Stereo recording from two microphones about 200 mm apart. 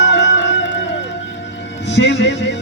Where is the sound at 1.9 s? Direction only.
60° left (ahead or behind).